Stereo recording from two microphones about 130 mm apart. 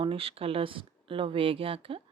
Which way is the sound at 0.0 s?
45° right (ahead or behind).